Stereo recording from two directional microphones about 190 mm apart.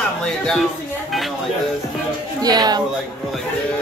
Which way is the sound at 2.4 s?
20° right (ahead or behind).